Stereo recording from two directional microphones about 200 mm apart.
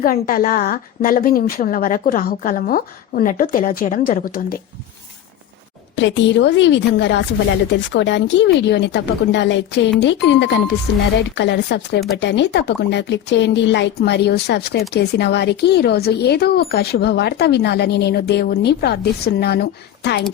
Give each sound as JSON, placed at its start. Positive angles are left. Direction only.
{"t": 0.0, "sound": "a woman's voice", "side_deg": 45}
{"t": 6.0, "sound": "speech", "side_deg": 65}